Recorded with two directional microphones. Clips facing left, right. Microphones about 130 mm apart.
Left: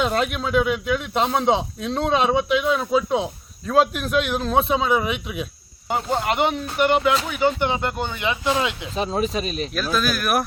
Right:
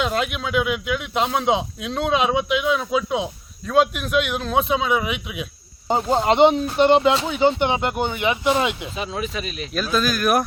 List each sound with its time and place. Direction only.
0.0 s a man's voice: centre (ahead or behind)
5.9 s speech: 25° right (ahead or behind)
9.0 s speech: 35° left (ahead or behind)
9.7 s a man's voice: centre (ahead or behind)